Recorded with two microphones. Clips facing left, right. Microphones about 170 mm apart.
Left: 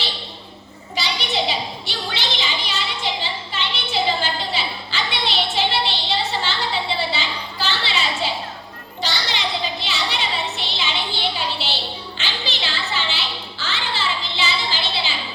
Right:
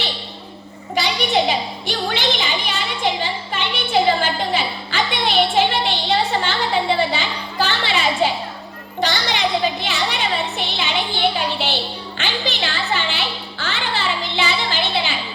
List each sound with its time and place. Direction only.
0.9 s a sound: 55° right (ahead or behind)
9.0 s children playing: 55° right (ahead or behind)
9.8 s music: 55° right (ahead or behind)